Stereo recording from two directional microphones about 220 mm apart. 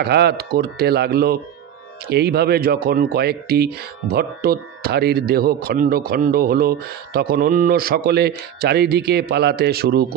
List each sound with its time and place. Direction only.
0.0 s speech: 45° right (ahead or behind)